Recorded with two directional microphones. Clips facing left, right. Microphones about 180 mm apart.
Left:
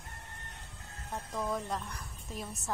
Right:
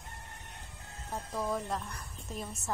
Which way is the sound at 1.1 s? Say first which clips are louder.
Right 1 dB; 5° right (ahead or behind).